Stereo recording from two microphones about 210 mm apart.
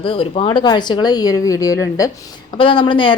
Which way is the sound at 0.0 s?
25° left (ahead or behind).